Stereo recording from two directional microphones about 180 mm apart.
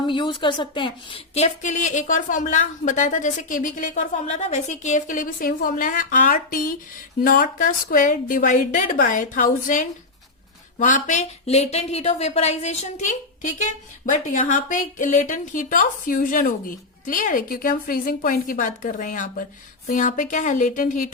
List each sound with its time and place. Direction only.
0.0 s a woman's voice: 25° left (ahead or behind); by 21.1 s 45° left (ahead or behind)